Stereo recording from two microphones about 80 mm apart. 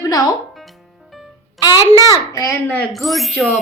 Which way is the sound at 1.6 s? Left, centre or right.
Left.